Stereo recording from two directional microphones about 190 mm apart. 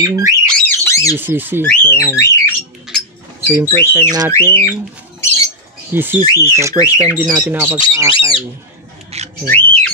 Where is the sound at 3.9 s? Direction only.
20° right (ahead or behind).